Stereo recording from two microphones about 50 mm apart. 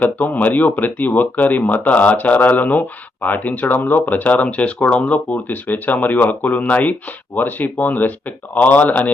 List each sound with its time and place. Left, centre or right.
0.0 s speech: left